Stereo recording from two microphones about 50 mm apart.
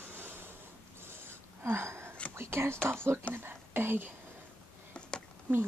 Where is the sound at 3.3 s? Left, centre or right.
Right.